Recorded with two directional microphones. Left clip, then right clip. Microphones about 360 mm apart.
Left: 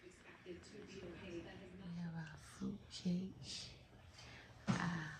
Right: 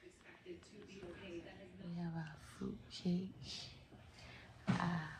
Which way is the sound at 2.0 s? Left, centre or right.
Centre.